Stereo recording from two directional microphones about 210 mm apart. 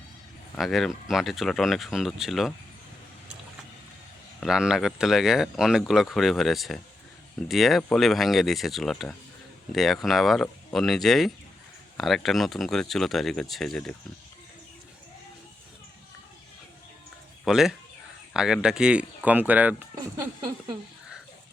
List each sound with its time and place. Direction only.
0.5 s speech: centre (ahead or behind)
4.4 s speech: 5° right (ahead or behind)
17.4 s speech: centre (ahead or behind)
20.1 s speech: 20° right (ahead or behind)